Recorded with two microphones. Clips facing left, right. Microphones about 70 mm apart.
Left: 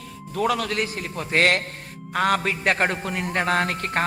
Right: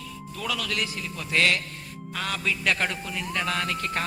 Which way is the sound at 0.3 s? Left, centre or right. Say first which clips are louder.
Left 7 dB; left.